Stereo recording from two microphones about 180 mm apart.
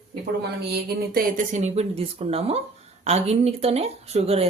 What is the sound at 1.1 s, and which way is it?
Speech, 45° right (ahead or behind).